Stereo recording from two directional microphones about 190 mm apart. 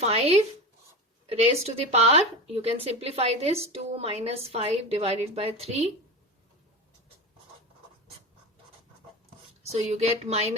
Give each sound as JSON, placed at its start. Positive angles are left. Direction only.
{"t": 0.0, "sound": "speech", "side_deg": -30}
{"t": 9.7, "sound": "speech", "side_deg": -35}